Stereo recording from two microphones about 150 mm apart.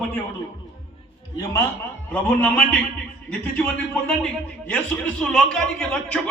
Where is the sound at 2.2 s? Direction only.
10° left (ahead or behind).